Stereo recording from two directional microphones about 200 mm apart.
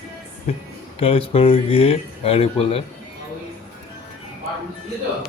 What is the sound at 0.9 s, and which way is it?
Speech, 30° left (ahead or behind).